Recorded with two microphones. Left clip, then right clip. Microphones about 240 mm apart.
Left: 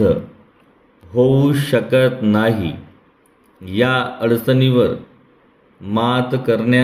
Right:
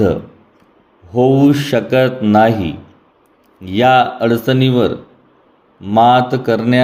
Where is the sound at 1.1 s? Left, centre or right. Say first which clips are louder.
Right 3 dB; centre.